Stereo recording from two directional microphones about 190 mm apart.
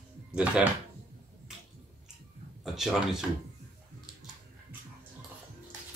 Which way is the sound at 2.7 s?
5° right (ahead or behind).